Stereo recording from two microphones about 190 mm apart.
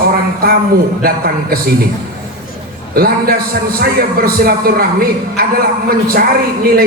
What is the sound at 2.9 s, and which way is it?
A man's voice, 55° right (ahead or behind).